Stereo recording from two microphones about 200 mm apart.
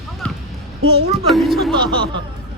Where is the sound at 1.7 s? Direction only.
25° right (ahead or behind).